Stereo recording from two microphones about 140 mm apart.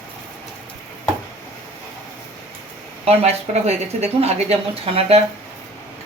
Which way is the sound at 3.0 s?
50° right (ahead or behind).